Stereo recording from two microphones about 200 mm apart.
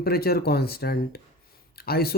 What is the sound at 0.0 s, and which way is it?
Speech, 50° left (ahead or behind).